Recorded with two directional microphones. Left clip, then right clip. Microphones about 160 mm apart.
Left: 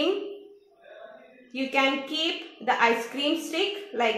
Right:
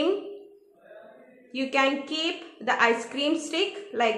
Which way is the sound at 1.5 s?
20° right (ahead or behind).